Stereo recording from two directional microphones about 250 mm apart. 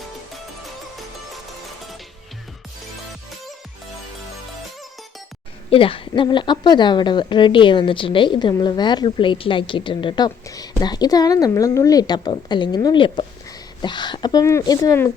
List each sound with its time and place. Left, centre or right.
5.7 s a woman's voice: left